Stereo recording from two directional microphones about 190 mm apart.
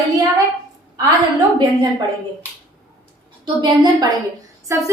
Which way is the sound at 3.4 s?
25° right (ahead or behind).